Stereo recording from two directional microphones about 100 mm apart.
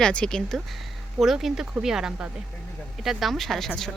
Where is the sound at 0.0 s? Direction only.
10° left (ahead or behind).